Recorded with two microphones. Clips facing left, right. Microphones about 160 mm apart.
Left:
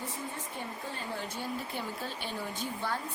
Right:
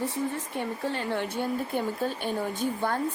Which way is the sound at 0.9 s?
70° right (ahead or behind).